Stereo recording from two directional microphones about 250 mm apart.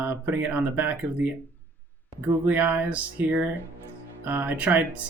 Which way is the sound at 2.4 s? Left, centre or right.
Centre.